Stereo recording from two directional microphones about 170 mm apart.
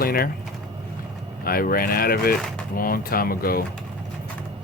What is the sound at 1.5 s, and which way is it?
Speech, 60° left (ahead or behind).